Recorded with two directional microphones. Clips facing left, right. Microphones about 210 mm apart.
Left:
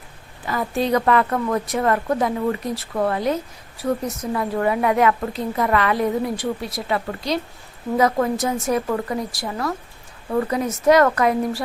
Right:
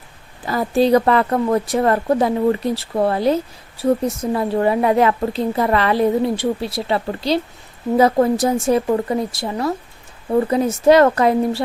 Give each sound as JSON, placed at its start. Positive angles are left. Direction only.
{"t": 0.4, "sound": "a woman's voice", "side_deg": -35}